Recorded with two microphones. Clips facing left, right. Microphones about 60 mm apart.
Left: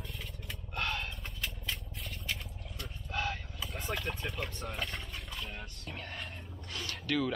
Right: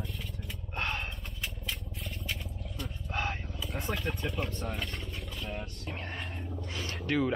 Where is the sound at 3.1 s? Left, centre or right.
Right.